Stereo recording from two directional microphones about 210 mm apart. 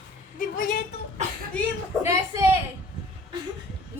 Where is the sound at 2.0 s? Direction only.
10° right (ahead or behind).